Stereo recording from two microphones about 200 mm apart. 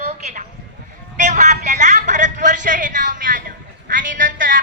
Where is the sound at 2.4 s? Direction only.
40° right (ahead or behind).